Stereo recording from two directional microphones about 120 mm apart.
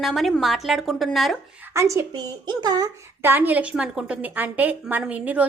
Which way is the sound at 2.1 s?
35° right (ahead or behind).